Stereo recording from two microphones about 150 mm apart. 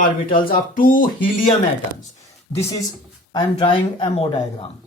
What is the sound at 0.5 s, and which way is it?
Speech, 65° left (ahead or behind).